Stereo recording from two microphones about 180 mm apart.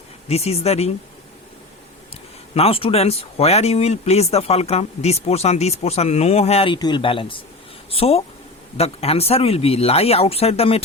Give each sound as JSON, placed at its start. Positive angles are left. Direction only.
{"t": 0.3, "sound": "speech", "side_deg": 35}
{"t": 2.6, "sound": "speech", "side_deg": 30}